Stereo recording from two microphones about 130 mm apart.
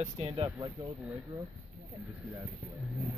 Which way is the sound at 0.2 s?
55° right (ahead or behind).